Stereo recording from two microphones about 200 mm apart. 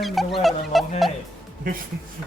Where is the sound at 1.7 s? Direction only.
45° right (ahead or behind).